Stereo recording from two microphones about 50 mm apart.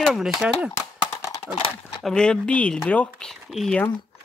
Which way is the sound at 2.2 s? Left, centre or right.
Left.